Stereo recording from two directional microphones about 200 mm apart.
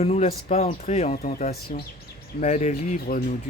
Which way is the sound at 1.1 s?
50° left (ahead or behind).